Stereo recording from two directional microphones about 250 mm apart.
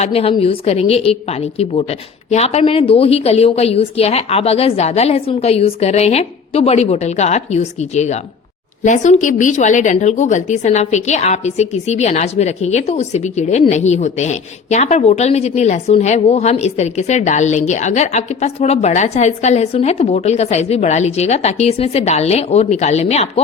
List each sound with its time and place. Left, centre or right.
0.0 s a woman's voice: left